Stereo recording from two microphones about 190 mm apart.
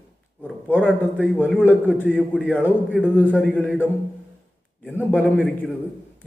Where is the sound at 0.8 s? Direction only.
5° right (ahead or behind).